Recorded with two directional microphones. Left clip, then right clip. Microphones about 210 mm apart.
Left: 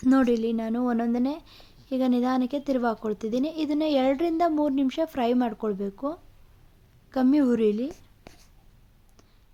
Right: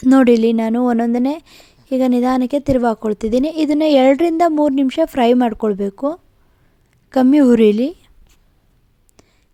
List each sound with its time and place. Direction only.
0.0 s a woman's voice: 40° right (ahead or behind)